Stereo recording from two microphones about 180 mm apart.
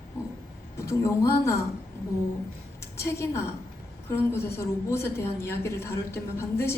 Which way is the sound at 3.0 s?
15° left (ahead or behind).